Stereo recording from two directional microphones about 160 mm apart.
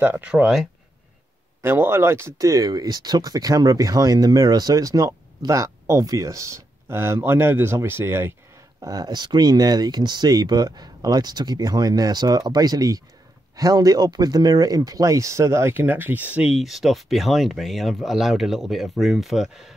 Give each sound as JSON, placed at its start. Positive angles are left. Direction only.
{"t": 0.0, "sound": "speech", "side_deg": -10}
{"t": 1.6, "sound": "speech", "side_deg": -15}